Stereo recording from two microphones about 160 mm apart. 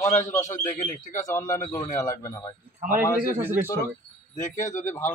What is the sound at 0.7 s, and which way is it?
Speech, 50° left (ahead or behind).